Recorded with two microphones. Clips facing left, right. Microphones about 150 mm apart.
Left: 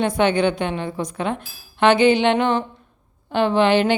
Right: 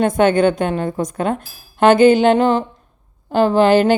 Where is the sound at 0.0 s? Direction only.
45° right (ahead or behind).